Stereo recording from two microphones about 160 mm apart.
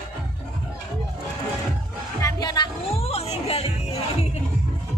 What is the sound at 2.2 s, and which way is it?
Music, 25° left (ahead or behind).